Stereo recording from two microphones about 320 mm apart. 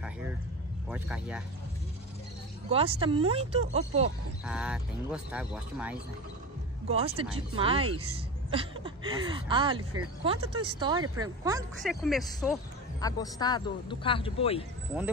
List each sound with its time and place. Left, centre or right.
0.8 s speech: centre
2.7 s speech: centre
4.5 s speech: centre
6.9 s speech: centre
11.8 s speech: centre
13.0 s speech: centre